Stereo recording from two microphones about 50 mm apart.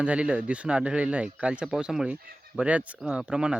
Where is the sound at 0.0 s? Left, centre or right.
Right.